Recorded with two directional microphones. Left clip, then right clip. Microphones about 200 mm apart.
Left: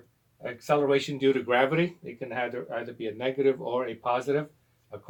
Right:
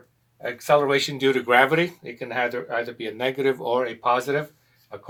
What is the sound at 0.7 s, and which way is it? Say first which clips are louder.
Speech: right 5 dB; 20° right (ahead or behind).